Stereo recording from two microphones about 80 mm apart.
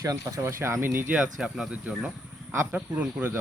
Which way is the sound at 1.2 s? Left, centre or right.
Centre.